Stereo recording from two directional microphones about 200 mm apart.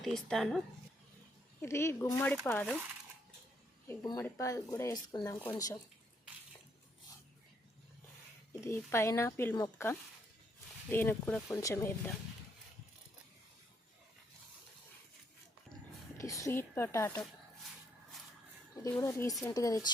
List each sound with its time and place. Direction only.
0.0 s speech: centre (ahead or behind)
1.6 s speech: 15° left (ahead or behind)
3.8 s speech: 15° left (ahead or behind)
8.6 s speech: 10° left (ahead or behind)
16.1 s speech: 15° left (ahead or behind)
18.8 s speech: 15° left (ahead or behind)